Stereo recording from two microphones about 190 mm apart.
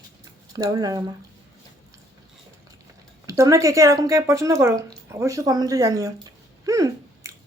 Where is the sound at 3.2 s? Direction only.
15° right (ahead or behind).